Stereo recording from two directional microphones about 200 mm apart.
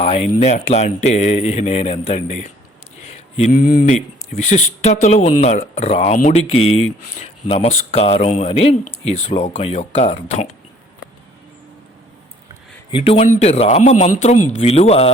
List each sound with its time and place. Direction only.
0.0 s speech: 30° left (ahead or behind)
4.4 s speech: 35° left (ahead or behind)
12.9 s speech: 30° left (ahead or behind)